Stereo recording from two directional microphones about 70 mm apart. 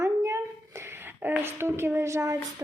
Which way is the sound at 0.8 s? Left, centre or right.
Right.